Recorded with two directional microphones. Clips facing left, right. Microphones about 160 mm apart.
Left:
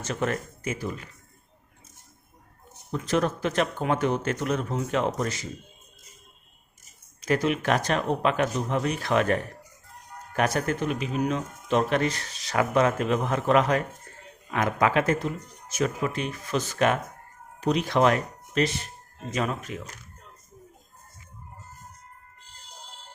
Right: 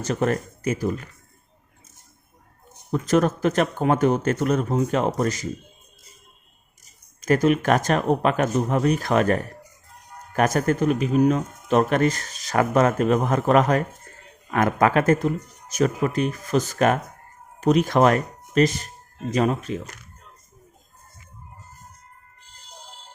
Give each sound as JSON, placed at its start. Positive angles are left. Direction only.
{"t": 0.0, "sound": "speech", "side_deg": -40}
{"t": 2.9, "sound": "speech", "side_deg": -45}
{"t": 6.8, "sound": "speech", "side_deg": -45}